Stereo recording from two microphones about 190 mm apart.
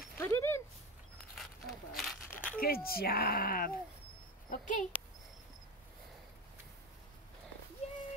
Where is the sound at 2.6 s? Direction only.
50° left (ahead or behind).